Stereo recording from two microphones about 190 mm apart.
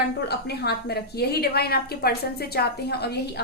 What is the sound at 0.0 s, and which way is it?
A woman's voice, 60° left (ahead or behind).